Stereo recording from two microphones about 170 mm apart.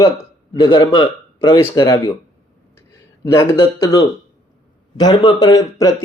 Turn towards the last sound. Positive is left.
turn(degrees=20)  # may be behind; listen again after turning